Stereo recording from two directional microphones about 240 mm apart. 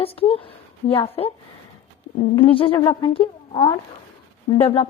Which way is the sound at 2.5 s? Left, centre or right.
Left.